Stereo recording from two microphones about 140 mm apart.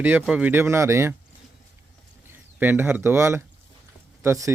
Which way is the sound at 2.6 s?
15° right (ahead or behind).